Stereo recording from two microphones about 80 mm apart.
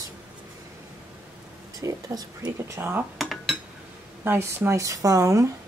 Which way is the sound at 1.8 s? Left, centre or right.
Right.